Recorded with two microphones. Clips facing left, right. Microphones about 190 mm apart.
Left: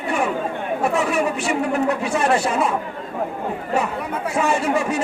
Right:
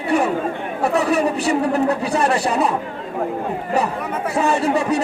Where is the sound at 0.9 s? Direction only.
35° right (ahead or behind).